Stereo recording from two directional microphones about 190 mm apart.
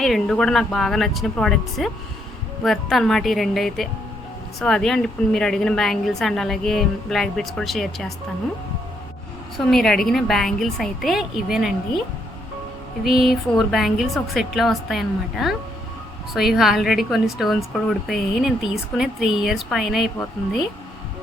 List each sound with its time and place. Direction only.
0.0 s a woman's voice: centre (ahead or behind)
9.6 s a woman's voice: centre (ahead or behind)
13.1 s a woman's voice: centre (ahead or behind)